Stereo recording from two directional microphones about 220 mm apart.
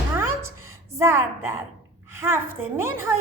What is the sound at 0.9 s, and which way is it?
A woman's voice, 10° right (ahead or behind).